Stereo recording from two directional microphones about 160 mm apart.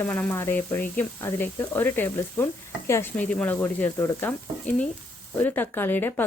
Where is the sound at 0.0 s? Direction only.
10° left (ahead or behind).